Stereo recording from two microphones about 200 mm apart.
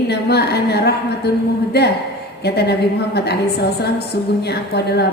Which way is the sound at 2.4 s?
55° left (ahead or behind).